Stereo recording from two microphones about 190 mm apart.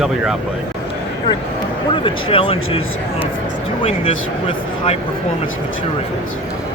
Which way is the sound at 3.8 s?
30° left (ahead or behind).